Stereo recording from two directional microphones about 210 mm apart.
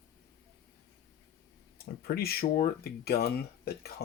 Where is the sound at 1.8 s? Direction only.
45° left (ahead or behind).